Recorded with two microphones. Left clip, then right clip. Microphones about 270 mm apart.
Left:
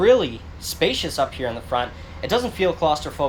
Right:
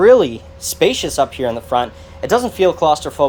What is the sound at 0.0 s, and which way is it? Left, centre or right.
Speech, right.